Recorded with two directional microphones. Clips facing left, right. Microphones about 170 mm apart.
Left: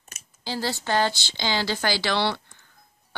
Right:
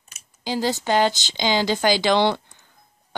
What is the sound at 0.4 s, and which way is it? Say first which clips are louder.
A woman's voice: right 5 dB; 15° right (ahead or behind).